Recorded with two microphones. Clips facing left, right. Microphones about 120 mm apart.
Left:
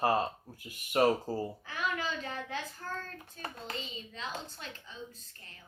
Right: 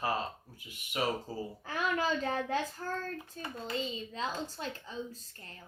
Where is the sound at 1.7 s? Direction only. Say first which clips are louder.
Right 6 dB; 45° right (ahead or behind).